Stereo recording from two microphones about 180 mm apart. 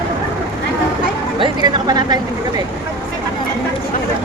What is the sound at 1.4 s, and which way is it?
Speech, 25° right (ahead or behind).